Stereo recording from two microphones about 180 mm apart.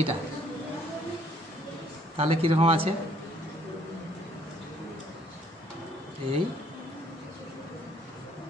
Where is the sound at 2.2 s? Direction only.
30° right (ahead or behind).